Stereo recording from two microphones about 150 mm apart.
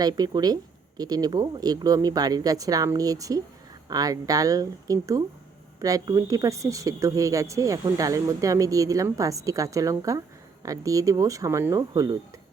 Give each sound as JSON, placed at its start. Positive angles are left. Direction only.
{"t": 0.0, "sound": "speech", "side_deg": -25}